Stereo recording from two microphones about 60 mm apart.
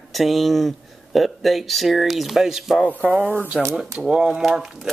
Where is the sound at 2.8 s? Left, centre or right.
Right.